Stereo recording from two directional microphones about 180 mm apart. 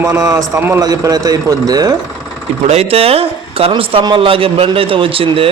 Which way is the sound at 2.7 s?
35° right (ahead or behind).